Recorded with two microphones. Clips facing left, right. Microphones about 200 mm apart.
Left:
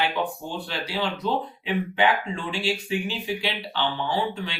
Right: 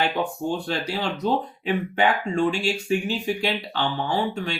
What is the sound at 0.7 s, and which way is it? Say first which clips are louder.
Speech: right 2 dB; 45° right (ahead or behind).